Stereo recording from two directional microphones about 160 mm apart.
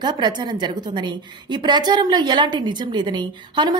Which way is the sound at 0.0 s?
25° right (ahead or behind).